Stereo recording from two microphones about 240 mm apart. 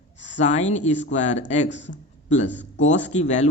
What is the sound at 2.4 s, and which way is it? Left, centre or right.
Speech, left.